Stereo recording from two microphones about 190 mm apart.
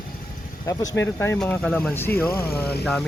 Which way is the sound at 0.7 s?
20° left (ahead or behind).